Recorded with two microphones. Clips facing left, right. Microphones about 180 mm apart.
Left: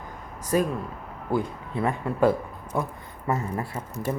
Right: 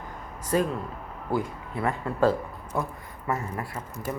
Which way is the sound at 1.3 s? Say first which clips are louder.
Left 2 dB; 20° left (ahead or behind).